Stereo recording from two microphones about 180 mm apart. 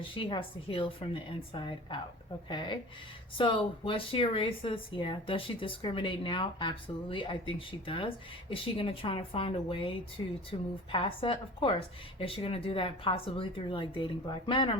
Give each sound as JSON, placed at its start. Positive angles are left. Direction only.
{"t": 0.0, "sound": "a woman's voice", "side_deg": 30}